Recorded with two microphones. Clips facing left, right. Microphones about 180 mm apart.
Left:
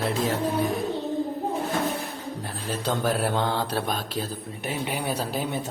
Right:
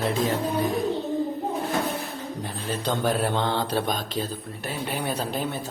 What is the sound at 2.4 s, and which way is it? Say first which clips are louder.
Speech: right 1 dB; 5° left (ahead or behind).